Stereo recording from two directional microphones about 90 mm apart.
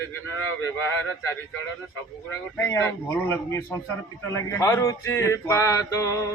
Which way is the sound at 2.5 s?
25° left (ahead or behind).